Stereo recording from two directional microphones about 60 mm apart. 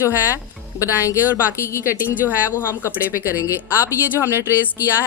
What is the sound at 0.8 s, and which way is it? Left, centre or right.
Speech, left.